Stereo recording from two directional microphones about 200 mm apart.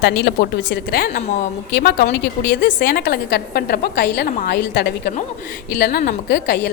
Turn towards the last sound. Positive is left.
turn(degrees=55)  # may be behind; listen again after turning